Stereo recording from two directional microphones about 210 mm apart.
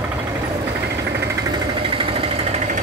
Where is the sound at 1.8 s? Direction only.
25° right (ahead or behind).